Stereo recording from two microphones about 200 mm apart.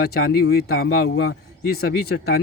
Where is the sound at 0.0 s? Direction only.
50° left (ahead or behind).